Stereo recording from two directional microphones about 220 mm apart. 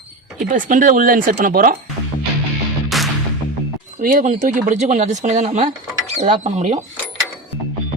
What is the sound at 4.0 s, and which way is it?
Speech, 40° right (ahead or behind).